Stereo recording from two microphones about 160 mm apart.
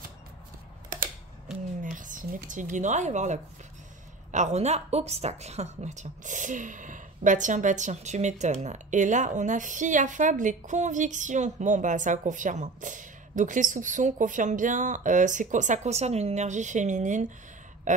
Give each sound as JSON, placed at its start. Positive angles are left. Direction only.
{"t": 1.8, "sound": "a woman's voice", "side_deg": -55}